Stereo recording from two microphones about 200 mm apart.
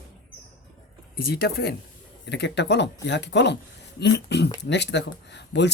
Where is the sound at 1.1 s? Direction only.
50° left (ahead or behind).